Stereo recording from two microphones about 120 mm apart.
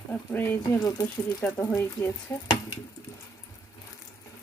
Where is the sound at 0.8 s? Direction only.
35° left (ahead or behind).